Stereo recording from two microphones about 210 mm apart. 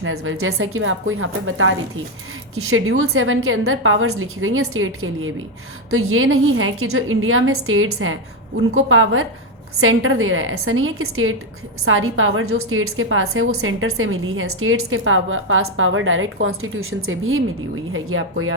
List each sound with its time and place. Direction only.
0.0 s a woman's voice: 75° right (ahead or behind)
2.6 s a woman's voice: 80° right